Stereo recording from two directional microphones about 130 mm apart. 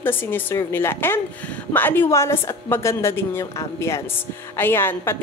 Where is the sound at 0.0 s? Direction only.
15° left (ahead or behind).